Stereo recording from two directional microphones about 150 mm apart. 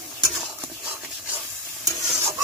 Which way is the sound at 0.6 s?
10° right (ahead or behind).